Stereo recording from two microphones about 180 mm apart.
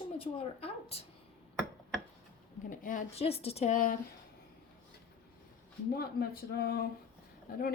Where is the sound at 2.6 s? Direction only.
50° left (ahead or behind).